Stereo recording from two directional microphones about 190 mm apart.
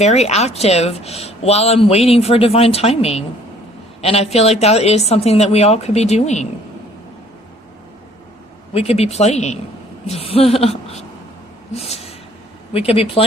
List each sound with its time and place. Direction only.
0.0 s speech: 35° left (ahead or behind)
8.7 s speech: 30° left (ahead or behind)
11.7 s a sound: 30° left (ahead or behind)
12.7 s speech: 30° left (ahead or behind)